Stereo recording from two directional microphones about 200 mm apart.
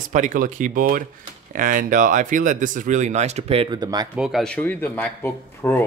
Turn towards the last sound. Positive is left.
turn(degrees=10)  # may be behind; listen again after turning